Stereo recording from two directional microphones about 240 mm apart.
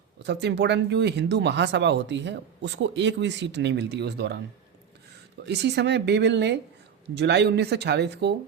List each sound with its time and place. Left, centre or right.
0.2 s speech: right
5.5 s speech: right